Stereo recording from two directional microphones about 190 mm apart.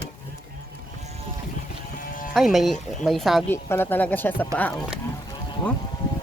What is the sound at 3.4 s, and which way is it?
Speech, 10° left (ahead or behind).